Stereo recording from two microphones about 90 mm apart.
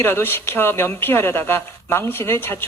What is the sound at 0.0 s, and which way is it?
A man's voice, 25° left (ahead or behind).